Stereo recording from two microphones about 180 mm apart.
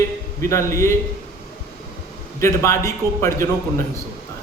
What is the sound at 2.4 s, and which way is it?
Speech, 15° left (ahead or behind).